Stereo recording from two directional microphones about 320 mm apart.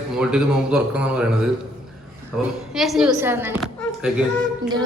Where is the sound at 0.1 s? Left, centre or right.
Centre.